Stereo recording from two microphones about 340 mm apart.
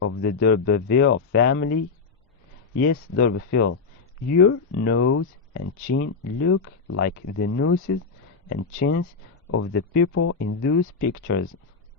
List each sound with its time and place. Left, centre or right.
0.0 s speech: left
2.8 s speech: left
10.2 s speech: left
10.6 s speech: left